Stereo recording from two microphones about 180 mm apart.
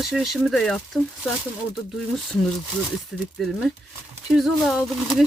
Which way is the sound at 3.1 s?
Centre (ahead or behind).